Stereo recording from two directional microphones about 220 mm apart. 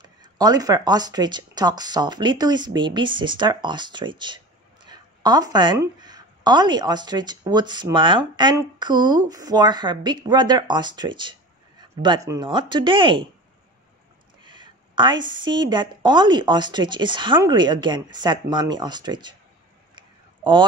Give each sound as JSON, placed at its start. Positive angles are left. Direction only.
{"t": 0.0, "sound": "a woman's voice", "side_deg": -20}
{"t": 14.4, "sound": "a woman's voice", "side_deg": -20}
{"t": 20.0, "sound": "a sound", "side_deg": -20}